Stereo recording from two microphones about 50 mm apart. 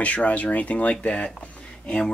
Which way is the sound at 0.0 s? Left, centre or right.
Left.